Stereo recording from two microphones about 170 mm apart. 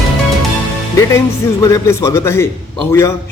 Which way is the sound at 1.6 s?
20° left (ahead or behind).